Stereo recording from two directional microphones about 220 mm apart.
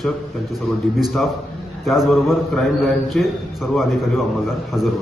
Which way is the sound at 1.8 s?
Centre (ahead or behind).